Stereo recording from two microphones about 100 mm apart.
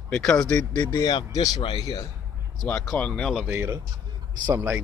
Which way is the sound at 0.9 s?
40° left (ahead or behind).